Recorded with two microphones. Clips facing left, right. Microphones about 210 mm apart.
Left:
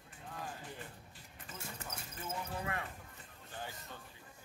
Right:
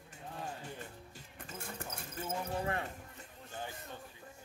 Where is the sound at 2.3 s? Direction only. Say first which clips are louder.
Right 4 dB; 30° right (ahead or behind).